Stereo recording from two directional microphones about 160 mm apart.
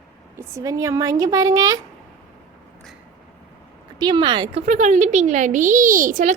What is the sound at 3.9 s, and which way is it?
Speech, 25° right (ahead or behind).